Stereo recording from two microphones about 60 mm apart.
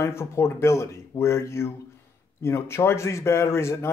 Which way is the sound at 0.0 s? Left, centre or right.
Left.